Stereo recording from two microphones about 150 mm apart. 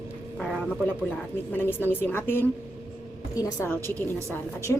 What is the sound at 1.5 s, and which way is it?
A woman's voice, 15° left (ahead or behind).